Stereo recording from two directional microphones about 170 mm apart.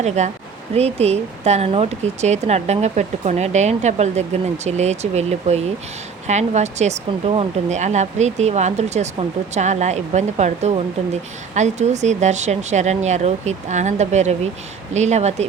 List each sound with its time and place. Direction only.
0.0 s speech: 40° right (ahead or behind)